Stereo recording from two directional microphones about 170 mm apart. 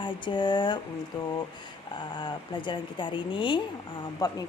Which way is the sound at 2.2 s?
25° left (ahead or behind).